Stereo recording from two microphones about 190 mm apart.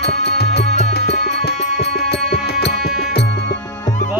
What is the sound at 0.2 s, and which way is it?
Music, 60° left (ahead or behind).